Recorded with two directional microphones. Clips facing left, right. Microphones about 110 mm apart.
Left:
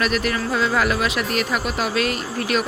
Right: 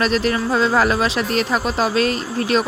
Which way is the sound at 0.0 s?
30° right (ahead or behind).